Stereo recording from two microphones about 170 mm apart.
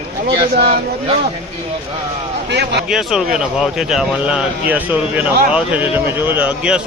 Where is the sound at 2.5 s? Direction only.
80° right.